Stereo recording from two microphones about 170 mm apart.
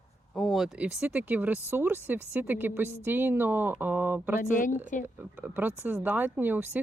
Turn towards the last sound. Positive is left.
turn(degrees=-10)  # may be behind; listen again after turning